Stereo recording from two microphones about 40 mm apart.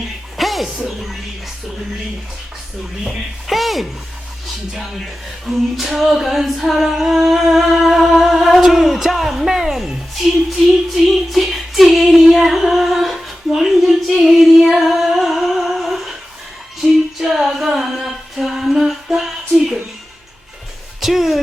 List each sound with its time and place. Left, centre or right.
0.3 s music: centre
3.0 s a capella: centre
5.5 s a capella: centre
6.7 s humming: centre
10.9 s female singing: centre
19.0 s a sound: centre
21.0 s speech: centre